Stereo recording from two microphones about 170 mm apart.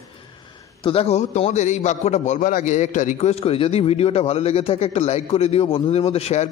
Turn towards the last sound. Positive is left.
turn(degrees=40)  # may be behind; listen again after turning